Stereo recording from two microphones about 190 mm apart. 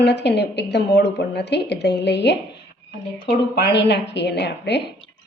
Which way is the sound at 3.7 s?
60° left (ahead or behind).